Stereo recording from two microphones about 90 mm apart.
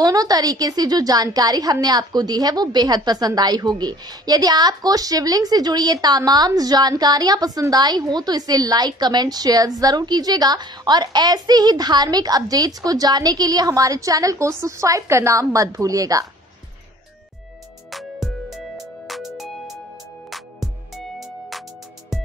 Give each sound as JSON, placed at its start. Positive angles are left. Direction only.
{"t": 0.0, "sound": "a woman's voice", "side_deg": -45}
{"t": 17.9, "sound": "music", "side_deg": 0}